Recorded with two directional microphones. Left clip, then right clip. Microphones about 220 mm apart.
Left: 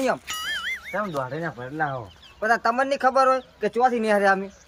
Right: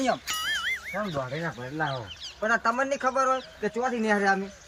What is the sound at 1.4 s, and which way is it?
Speech, 10° left (ahead or behind).